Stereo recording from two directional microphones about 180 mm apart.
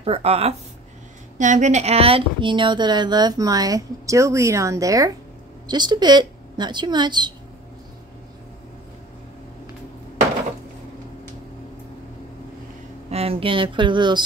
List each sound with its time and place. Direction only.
0.0 s a woman's voice: 35° right (ahead or behind)
13.1 s a woman's voice: 35° right (ahead or behind)